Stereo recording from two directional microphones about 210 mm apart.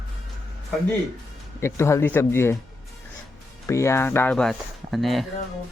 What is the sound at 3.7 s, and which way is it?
Speech, 15° left (ahead or behind).